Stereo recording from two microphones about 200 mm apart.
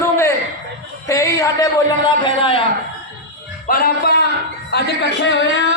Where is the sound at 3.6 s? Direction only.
45° left (ahead or behind).